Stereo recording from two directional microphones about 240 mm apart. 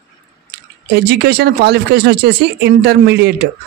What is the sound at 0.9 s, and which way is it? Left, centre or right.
Speech, right.